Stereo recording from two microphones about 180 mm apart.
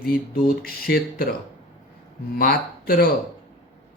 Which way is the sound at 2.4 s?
55° left (ahead or behind).